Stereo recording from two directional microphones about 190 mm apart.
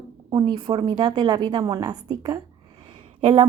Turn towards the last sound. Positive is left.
turn(degrees=-25)  # may be behind; listen again after turning